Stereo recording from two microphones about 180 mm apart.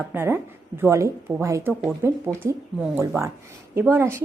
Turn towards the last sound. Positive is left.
turn(degrees=-15)  # may be behind; listen again after turning